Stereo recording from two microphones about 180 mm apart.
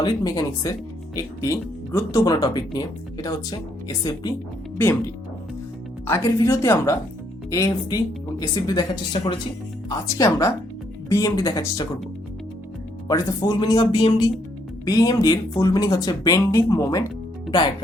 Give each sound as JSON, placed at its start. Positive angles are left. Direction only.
{"t": 0.0, "sound": "a woman's voice", "side_deg": 20}
{"t": 13.1, "sound": "speech", "side_deg": 20}